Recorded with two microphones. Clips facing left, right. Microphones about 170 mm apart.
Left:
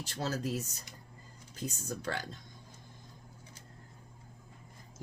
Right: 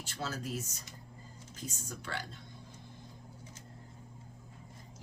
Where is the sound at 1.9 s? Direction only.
40° left (ahead or behind).